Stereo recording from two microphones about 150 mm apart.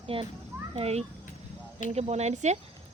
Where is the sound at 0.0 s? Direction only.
40° right (ahead or behind).